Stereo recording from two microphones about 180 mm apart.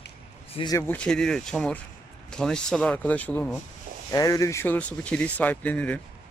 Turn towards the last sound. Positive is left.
turn(degrees=10)  # may be behind; listen again after turning